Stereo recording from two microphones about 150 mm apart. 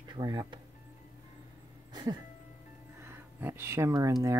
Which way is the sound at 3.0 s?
15° right (ahead or behind).